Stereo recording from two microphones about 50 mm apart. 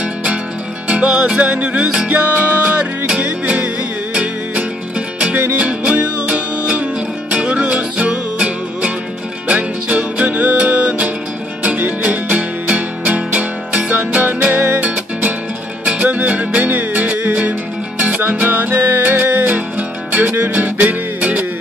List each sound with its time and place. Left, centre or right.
0.0 s music: right